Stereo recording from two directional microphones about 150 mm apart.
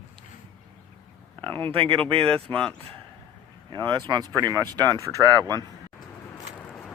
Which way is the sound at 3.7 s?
30° right (ahead or behind).